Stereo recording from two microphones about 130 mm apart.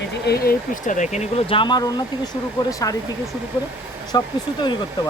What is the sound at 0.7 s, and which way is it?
Speech, 70° left (ahead or behind).